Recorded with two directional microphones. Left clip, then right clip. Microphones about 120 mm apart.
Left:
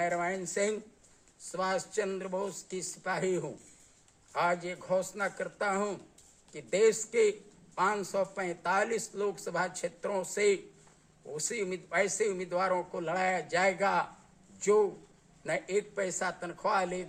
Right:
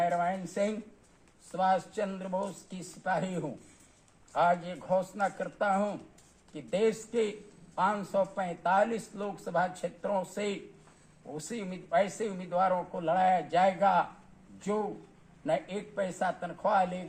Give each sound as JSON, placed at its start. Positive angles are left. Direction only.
{"t": 0.2, "sound": "speech", "side_deg": 40}
{"t": 4.4, "sound": "a man's voice", "side_deg": 40}
{"t": 15.4, "sound": "speech", "side_deg": 45}